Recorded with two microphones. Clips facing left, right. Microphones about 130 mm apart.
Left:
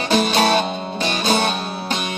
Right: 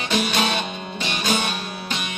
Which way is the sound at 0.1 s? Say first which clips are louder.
Left 6 dB; 35° left (ahead or behind).